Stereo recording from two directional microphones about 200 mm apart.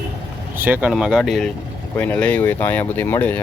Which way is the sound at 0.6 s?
10° right (ahead or behind).